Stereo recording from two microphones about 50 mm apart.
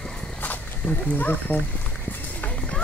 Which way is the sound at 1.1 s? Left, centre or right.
Left.